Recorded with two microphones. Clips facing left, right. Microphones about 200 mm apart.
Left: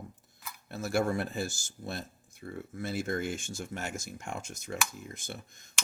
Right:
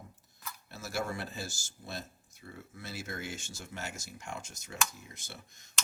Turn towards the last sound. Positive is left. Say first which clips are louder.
# left 7 dB
turn(degrees=50)  # may be behind; listen again after turning